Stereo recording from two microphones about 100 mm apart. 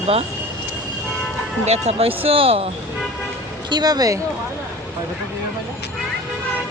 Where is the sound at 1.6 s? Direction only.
90° right; by 2.6 s 70° right (ahead or behind).